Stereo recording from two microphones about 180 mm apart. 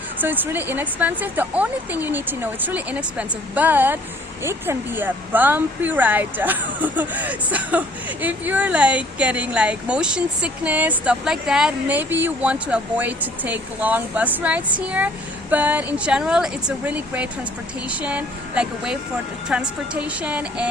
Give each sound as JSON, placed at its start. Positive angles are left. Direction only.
{"t": 0.2, "sound": "speech", "side_deg": -10}